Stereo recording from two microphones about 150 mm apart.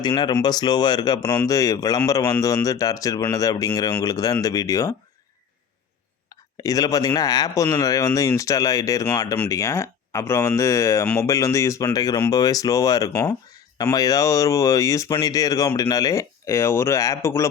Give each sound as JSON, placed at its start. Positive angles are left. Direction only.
{"t": 0.0, "sound": "speech", "side_deg": 30}
{"t": 6.6, "sound": "speech", "side_deg": 25}